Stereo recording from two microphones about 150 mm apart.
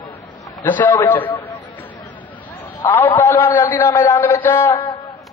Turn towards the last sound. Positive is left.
turn(degrees=15)  # may be behind; listen again after turning